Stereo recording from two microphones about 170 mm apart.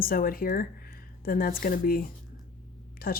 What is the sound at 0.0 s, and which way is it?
Speech, 60° left (ahead or behind).